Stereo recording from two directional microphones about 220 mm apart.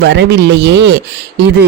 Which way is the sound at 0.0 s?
50° right (ahead or behind).